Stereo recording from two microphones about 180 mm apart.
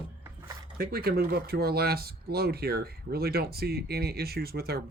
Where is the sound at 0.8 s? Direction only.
55° right (ahead or behind).